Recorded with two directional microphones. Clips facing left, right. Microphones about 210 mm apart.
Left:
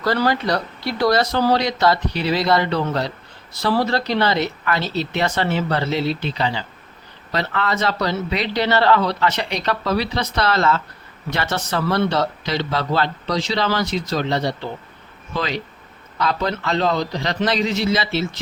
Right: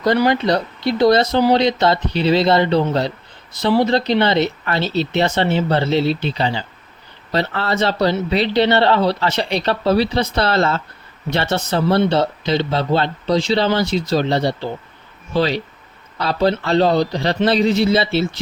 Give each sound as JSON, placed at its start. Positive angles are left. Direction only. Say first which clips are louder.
{"t": 0.0, "sound": "a man's voice", "louder": "right 4 dB", "side_deg": -20}